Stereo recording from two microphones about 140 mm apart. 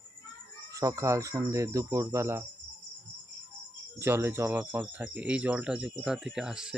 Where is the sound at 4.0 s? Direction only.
15° right (ahead or behind).